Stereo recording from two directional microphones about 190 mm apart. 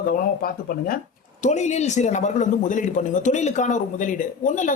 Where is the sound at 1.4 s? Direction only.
40° left (ahead or behind).